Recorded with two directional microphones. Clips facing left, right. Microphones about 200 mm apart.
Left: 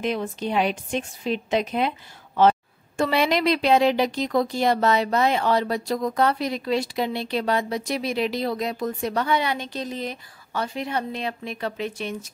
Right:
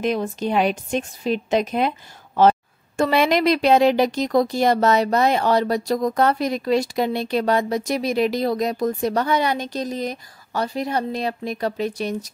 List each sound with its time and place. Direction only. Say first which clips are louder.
0.0 s speech: right 4 dB; 45° right (ahead or behind)